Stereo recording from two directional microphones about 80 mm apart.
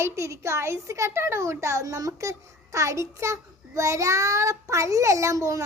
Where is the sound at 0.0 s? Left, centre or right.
Right.